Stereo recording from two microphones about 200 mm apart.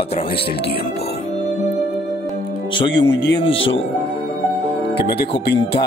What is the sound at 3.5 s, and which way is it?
Speech, 75° left (ahead or behind).